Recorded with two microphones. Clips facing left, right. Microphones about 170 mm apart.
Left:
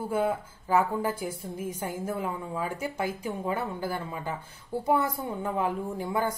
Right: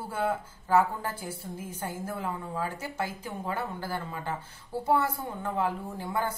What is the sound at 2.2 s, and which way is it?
A woman's voice, 15° left (ahead or behind).